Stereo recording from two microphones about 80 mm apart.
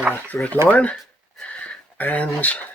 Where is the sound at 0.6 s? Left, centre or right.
Centre.